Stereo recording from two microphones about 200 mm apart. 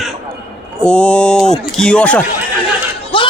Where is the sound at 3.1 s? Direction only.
25° left (ahead or behind).